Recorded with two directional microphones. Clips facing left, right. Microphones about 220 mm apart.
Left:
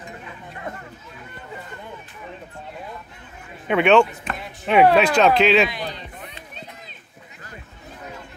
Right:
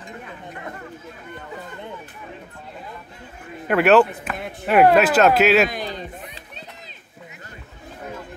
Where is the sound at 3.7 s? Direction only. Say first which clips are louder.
Right 1 dB; 5° right (ahead or behind).